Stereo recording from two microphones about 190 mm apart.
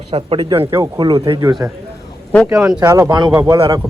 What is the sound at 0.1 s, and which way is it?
Speech, 30° right (ahead or behind).